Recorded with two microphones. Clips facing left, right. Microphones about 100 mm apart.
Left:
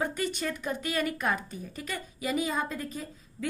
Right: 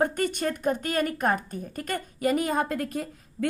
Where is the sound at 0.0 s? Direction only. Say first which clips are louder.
Right 5 dB; 50° right (ahead or behind).